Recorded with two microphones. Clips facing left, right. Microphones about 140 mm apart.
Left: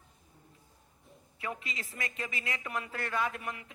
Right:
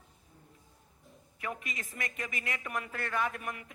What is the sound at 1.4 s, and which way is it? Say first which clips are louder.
A woman's voice: even; 20° left (ahead or behind).